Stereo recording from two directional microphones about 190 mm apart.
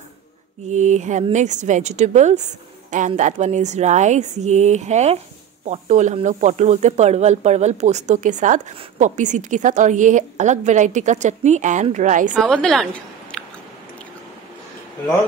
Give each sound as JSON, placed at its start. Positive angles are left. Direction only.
{"t": 0.7, "sound": "speech", "side_deg": -40}
{"t": 12.4, "sound": "a woman's voice", "side_deg": 5}
{"t": 13.3, "sound": "chewing", "side_deg": 5}